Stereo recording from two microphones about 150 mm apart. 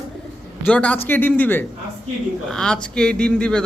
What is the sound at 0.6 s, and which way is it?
A man's voice, 10° left (ahead or behind).